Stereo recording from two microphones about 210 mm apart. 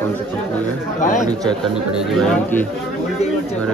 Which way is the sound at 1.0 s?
40° left (ahead or behind).